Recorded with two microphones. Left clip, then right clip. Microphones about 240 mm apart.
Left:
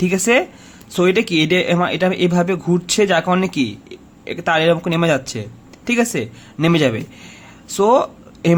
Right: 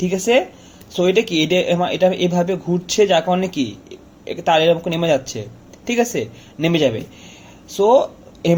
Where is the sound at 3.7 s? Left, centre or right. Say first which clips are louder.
Left 2 dB; left.